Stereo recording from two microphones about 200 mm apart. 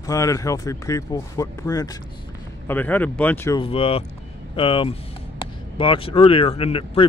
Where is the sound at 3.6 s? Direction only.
30° left (ahead or behind).